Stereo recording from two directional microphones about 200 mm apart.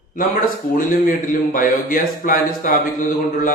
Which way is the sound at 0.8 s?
40° left (ahead or behind).